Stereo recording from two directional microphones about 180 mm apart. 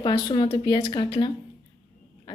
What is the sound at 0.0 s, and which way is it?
A woman's voice, 25° left (ahead or behind).